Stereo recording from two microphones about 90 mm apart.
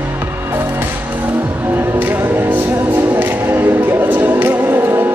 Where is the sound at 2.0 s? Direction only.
20° right (ahead or behind).